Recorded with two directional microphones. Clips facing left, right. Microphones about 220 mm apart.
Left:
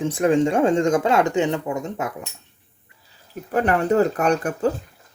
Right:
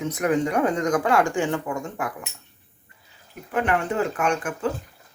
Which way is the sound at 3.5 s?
40° left (ahead or behind).